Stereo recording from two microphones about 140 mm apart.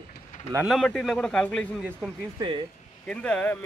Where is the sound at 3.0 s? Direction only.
10° left (ahead or behind).